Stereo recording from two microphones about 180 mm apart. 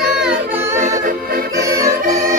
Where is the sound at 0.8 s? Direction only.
45° right (ahead or behind).